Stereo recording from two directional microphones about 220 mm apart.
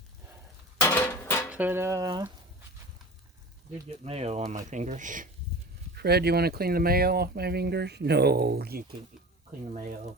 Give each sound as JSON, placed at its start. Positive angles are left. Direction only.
{"t": 0.8, "sound": "a sound", "side_deg": 10}
{"t": 1.5, "sound": "dishes", "side_deg": -10}
{"t": 4.0, "sound": "speech", "side_deg": -30}
{"t": 6.0, "sound": "speech", "side_deg": -45}